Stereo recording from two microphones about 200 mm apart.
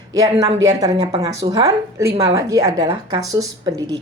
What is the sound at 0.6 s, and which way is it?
A woman's voice, 15° right (ahead or behind).